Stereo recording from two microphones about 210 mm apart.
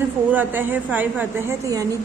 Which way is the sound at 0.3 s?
10° right (ahead or behind).